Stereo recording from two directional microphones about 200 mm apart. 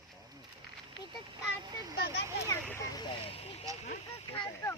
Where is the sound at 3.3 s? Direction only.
30° left (ahead or behind).